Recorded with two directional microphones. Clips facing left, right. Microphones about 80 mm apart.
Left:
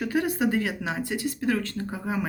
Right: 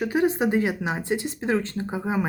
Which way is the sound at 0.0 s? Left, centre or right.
Right.